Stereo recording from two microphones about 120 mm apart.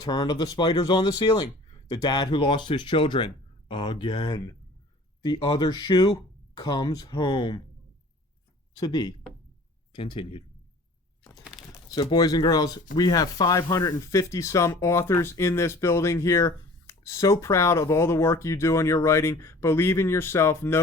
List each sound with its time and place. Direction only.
0.0 s speech: 35° left (ahead or behind)
8.7 s speech: 35° left (ahead or behind)
11.9 s speech: 35° left (ahead or behind)